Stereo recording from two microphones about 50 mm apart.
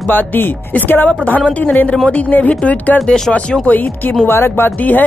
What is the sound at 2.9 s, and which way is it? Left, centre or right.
Speech, centre.